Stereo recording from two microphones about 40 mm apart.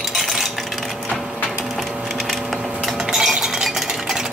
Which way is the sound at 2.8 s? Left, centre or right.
Centre.